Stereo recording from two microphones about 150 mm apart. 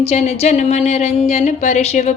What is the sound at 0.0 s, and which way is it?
Speech, 45° left (ahead or behind).